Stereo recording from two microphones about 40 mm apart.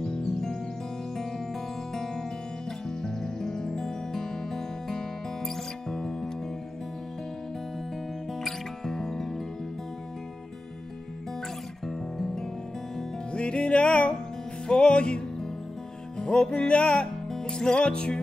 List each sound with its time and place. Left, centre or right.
0.0 s music: centre
8.3 s music: centre
11.8 s music: centre
13.3 s music: left